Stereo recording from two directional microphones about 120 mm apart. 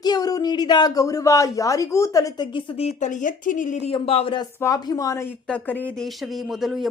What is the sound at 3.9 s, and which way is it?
Speech, 50° left (ahead or behind).